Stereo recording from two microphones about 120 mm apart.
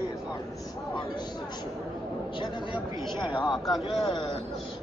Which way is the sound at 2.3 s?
40° left (ahead or behind).